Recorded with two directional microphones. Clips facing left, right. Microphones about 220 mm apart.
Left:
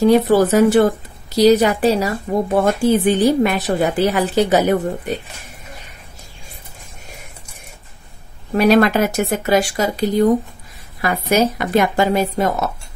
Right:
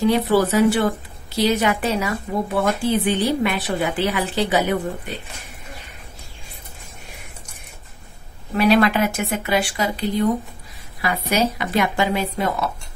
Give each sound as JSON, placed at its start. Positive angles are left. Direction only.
{"t": 0.0, "sound": "a woman's voice", "side_deg": 45}
{"t": 8.5, "sound": "a woman's voice", "side_deg": 45}